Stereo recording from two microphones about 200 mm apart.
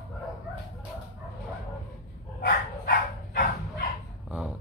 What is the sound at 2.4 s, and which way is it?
Dog, 45° left (ahead or behind).